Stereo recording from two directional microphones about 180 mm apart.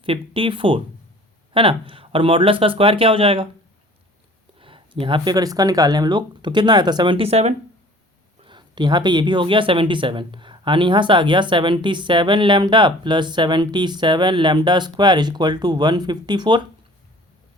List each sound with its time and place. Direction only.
0.0 s speech: 30° right (ahead or behind)
4.5 s speech: 30° right (ahead or behind)